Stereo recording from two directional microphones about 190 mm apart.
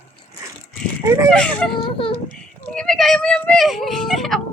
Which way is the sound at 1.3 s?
5° left (ahead or behind).